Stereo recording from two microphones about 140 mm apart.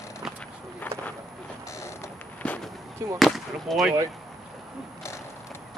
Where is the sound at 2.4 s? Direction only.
10° left (ahead or behind).